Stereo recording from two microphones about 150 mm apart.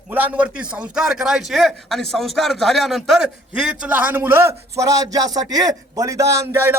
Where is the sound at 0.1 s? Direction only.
10° right (ahead or behind).